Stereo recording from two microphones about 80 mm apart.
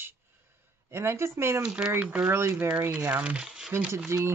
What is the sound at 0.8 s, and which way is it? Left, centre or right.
Speech, right.